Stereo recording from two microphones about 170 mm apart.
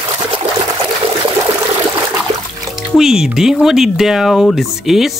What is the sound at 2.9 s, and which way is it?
Speech, centre (ahead or behind).